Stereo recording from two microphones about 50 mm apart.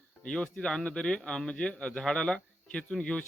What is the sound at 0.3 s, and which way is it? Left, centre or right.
Speech, left.